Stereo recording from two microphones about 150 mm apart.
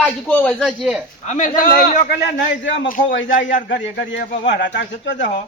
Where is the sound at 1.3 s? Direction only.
60° left (ahead or behind).